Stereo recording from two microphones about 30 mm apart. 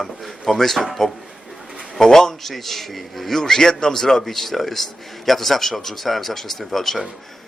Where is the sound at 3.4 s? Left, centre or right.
Centre.